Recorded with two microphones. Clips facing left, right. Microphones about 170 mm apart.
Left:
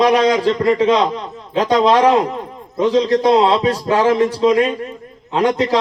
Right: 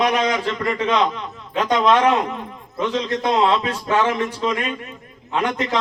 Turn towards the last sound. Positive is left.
turn(degrees=35)  # may be behind; listen again after turning